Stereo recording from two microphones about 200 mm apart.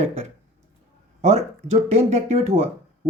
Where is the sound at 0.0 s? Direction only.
30° right (ahead or behind).